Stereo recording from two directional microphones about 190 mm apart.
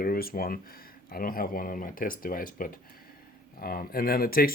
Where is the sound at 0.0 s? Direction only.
50° left (ahead or behind).